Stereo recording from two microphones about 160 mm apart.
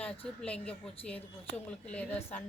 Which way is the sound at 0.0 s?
5° left (ahead or behind).